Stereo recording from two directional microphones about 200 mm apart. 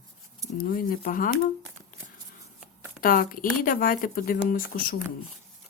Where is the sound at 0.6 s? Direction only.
45° left (ahead or behind).